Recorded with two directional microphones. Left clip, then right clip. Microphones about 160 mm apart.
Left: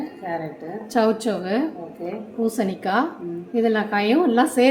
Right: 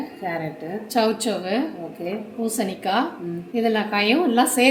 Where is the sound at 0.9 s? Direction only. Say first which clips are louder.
Left 1 dB; 30° left (ahead or behind).